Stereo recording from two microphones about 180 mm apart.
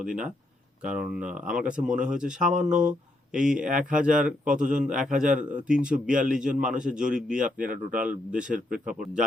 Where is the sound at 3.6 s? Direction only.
45° right (ahead or behind).